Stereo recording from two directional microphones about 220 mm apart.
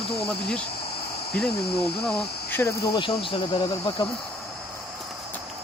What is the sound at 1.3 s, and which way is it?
Speech, 5° left (ahead or behind).